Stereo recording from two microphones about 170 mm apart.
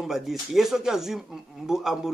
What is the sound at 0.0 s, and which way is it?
Speech, centre (ahead or behind).